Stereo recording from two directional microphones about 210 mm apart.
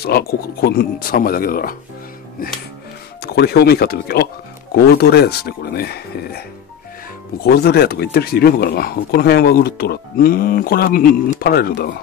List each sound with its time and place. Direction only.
0.0 s speech: 45° left (ahead or behind)
3.2 s speech: 50° left (ahead or behind)
7.4 s speech: 50° left (ahead or behind)